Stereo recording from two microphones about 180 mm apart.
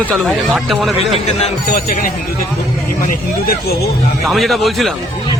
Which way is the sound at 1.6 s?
55° left (ahead or behind).